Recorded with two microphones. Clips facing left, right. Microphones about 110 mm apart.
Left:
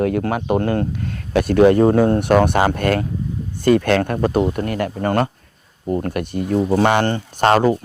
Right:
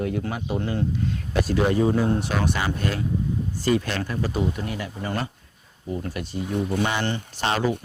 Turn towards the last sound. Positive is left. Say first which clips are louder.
# left 9 dB
turn(degrees=50)  # may be behind; listen again after turning